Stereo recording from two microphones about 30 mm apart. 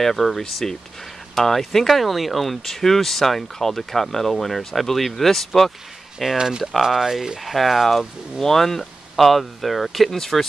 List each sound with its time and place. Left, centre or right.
0.0 s speech: centre
6.3 s speech: right
6.8 s speech: centre
7.4 s speech: centre
8.4 s speech: centre
10.1 s speech: centre